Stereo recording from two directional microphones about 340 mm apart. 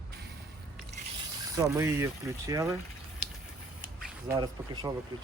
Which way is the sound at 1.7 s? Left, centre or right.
Centre.